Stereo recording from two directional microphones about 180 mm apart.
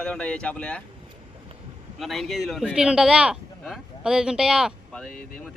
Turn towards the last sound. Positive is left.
turn(degrees=5)  # may be behind; listen again after turning